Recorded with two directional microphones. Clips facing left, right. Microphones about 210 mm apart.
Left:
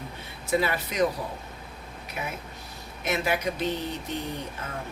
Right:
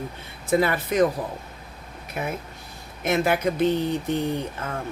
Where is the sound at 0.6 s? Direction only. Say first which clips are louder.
Right 6 dB; 50° right (ahead or behind).